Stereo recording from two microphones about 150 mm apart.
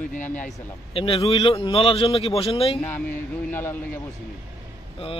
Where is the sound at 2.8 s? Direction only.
10° left (ahead or behind).